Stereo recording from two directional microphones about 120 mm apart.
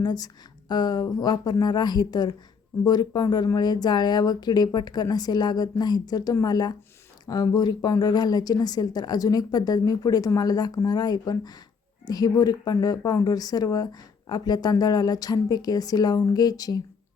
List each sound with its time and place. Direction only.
0.0 s speech: 35° left (ahead or behind)